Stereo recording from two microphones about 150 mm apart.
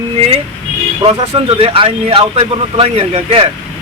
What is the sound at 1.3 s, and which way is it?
A man's voice, 40° right (ahead or behind).